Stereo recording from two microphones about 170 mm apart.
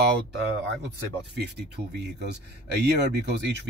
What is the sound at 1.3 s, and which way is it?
Speech, 80° right.